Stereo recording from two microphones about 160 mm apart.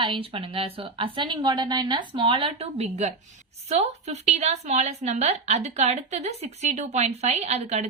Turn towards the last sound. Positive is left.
turn(degrees=-40)  # may be behind; listen again after turning